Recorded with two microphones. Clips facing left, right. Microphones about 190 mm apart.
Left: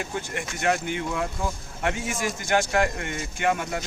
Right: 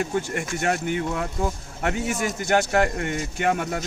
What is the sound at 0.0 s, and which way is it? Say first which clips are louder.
Speech: right 5 dB; 45° right (ahead or behind).